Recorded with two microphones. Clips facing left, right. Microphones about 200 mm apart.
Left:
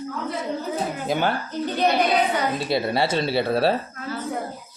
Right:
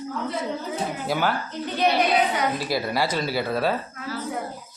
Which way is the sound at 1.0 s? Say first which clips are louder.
Left 1 dB; 25° left (ahead or behind).